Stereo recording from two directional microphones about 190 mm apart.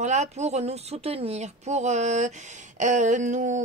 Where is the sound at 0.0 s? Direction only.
40° right (ahead or behind).